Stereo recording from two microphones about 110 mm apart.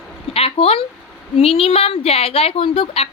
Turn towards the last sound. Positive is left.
turn(degrees=60)  # may be behind; listen again after turning